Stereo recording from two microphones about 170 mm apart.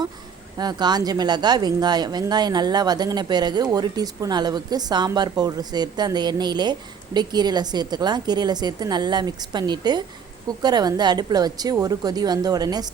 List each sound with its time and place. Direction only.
0.6 s speech: 25° right (ahead or behind)